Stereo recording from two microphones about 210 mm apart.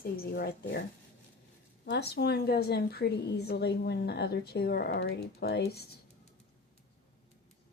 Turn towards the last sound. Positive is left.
turn(degrees=50)  # may be behind; listen again after turning